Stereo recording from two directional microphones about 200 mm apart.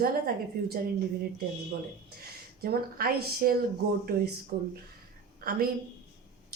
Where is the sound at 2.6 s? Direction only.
50° right (ahead or behind).